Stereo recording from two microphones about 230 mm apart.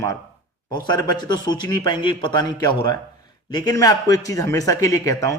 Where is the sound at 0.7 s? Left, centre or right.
Centre.